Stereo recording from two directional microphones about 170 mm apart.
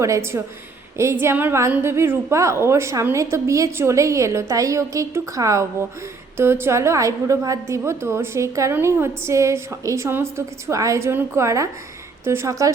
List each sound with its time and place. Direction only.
0.0 s a woman's voice: 15° right (ahead or behind)